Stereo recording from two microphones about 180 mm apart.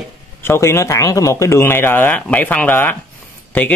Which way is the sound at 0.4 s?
15° left (ahead or behind).